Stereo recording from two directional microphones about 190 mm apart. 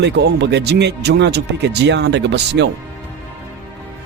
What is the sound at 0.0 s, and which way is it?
Speech, 65° right (ahead or behind).